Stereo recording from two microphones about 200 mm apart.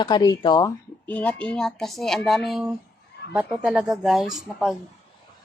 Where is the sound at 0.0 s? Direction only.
20° left (ahead or behind).